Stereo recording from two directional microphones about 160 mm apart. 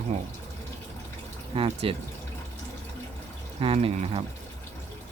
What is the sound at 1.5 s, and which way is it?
Speech, 35° right (ahead or behind).